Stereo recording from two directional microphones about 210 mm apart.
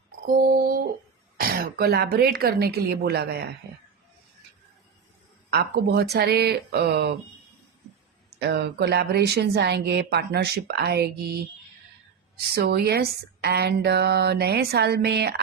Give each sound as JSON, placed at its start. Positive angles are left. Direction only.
{"t": 0.3, "sound": "a woman's voice", "side_deg": -45}
{"t": 5.5, "sound": "a woman's voice", "side_deg": -50}
{"t": 8.4, "sound": "a woman's voice", "side_deg": -50}
{"t": 12.4, "sound": "a woman's voice", "side_deg": -50}